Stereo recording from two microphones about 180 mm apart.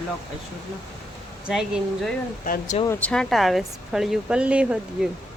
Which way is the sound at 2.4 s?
50° left (ahead or behind).